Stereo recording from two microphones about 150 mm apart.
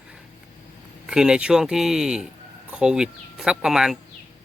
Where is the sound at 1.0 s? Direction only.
5° right (ahead or behind).